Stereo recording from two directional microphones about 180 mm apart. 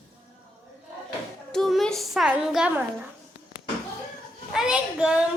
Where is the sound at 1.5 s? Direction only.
Centre (ahead or behind).